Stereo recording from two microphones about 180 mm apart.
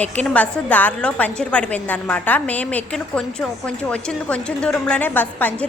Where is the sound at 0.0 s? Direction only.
5° left (ahead or behind).